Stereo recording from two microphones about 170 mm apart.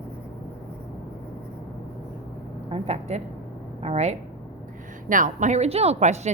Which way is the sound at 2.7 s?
40° right (ahead or behind).